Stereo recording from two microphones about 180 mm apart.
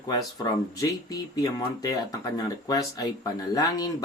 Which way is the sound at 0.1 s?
20° left (ahead or behind).